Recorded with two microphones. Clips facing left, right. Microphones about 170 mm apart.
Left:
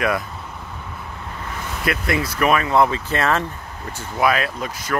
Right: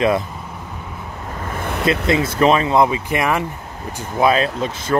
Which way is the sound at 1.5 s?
55° right (ahead or behind).